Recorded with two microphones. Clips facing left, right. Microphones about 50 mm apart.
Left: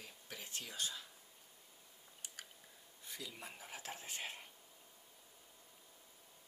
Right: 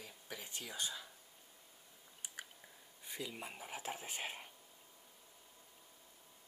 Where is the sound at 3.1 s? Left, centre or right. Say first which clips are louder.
Right 4 dB; centre.